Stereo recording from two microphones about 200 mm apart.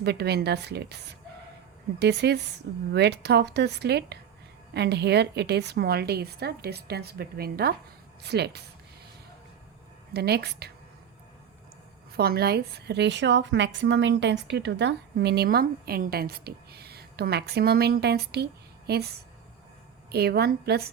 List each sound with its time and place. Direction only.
0.0 s a woman's voice: 55° right (ahead or behind)
10.1 s a woman's voice: 55° right (ahead or behind)
12.1 s a woman's voice: 50° right (ahead or behind)